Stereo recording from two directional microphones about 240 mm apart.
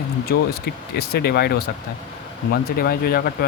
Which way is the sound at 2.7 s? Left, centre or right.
Left.